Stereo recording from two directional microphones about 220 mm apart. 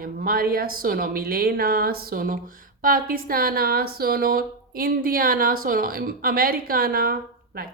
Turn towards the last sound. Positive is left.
turn(degrees=-40)  # may be behind; listen again after turning